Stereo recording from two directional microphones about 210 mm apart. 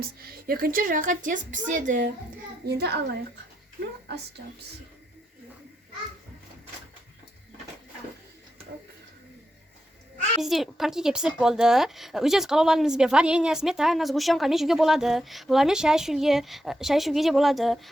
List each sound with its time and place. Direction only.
0.2 s a woman's voice: 45° right (ahead or behind)
2.6 s a child's voice: 50° right (ahead or behind)
10.4 s a woman's voice: centre (ahead or behind)